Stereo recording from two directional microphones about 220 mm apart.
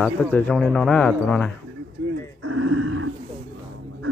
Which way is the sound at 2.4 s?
80° right.